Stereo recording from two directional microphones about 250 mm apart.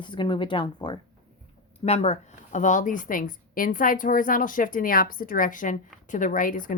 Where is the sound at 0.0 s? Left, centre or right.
Centre.